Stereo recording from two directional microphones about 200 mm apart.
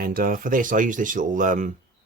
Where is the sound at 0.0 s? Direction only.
45° right (ahead or behind).